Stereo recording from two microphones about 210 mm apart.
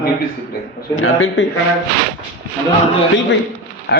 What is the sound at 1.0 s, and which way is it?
Speech, 65° left (ahead or behind).